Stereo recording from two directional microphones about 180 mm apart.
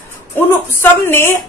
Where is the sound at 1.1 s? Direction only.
15° left (ahead or behind).